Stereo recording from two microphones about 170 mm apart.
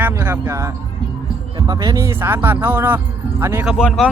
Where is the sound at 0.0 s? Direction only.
15° right (ahead or behind).